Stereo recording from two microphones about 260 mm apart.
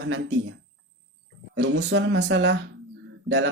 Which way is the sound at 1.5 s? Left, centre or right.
Right.